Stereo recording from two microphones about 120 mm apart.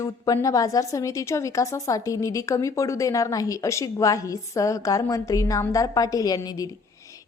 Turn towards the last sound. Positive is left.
turn(degrees=30)  # may be behind; listen again after turning